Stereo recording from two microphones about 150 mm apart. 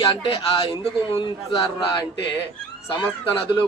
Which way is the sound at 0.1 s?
40° left (ahead or behind).